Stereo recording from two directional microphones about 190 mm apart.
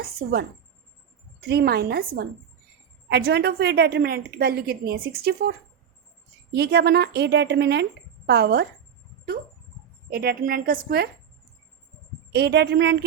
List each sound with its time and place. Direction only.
0.0 s a woman's voice: 55° right (ahead or behind)
10.1 s a woman's voice: 55° right (ahead or behind)
12.3 s a woman's voice: 60° right (ahead or behind)